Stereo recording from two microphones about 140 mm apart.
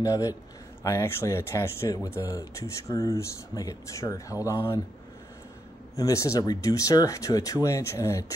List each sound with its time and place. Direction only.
0.0 s speech: 25° left (ahead or behind)
5.9 s speech: 20° left (ahead or behind)